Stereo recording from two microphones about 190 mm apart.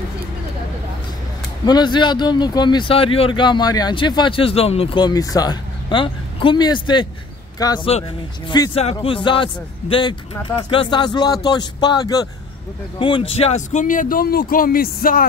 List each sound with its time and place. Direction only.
1.7 s speech: 25° left (ahead or behind)
13.3 s speech: 35° left (ahead or behind); by 15.2 s 50° left (ahead or behind)